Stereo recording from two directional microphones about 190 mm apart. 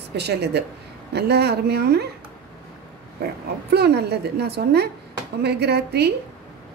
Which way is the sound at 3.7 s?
60° right (ahead or behind).